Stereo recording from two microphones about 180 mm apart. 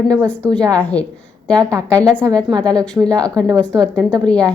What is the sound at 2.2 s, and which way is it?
Speech, 20° right (ahead or behind).